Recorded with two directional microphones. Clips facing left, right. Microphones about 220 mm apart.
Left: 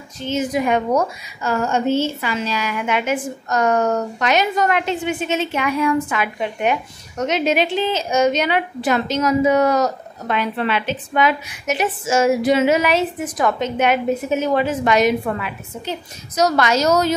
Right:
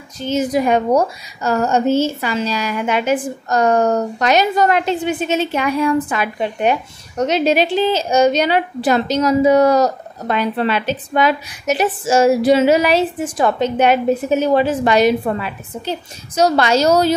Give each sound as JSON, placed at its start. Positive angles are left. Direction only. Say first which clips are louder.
{"t": 0.3, "sound": "a woman's voice", "louder": "right 3 dB", "side_deg": -35}